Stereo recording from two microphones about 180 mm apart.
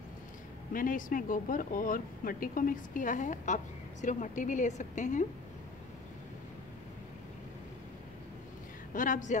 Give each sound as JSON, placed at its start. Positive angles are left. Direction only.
{"t": 0.7, "sound": "speech", "side_deg": 50}
{"t": 8.9, "sound": "speech", "side_deg": 45}